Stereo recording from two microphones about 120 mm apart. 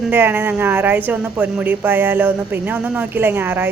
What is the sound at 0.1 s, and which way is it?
A woman's voice, 15° right (ahead or behind).